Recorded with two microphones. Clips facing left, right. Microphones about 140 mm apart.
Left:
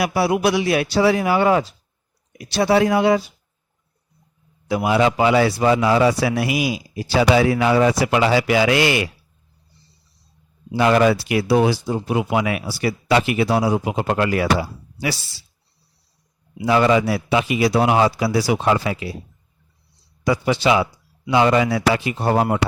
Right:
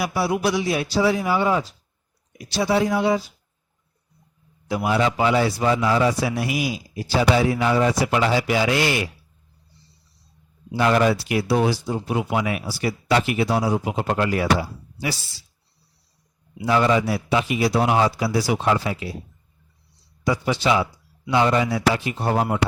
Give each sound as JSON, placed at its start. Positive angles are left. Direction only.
{"t": 0.0, "sound": "a man's voice", "side_deg": 70}
{"t": 4.7, "sound": "a man's voice", "side_deg": 85}
{"t": 10.8, "sound": "speech", "side_deg": 90}
{"t": 16.6, "sound": "speech", "side_deg": 90}
{"t": 20.2, "sound": "a man's voice", "side_deg": 80}
{"t": 21.2, "sound": "a man's voice", "side_deg": 90}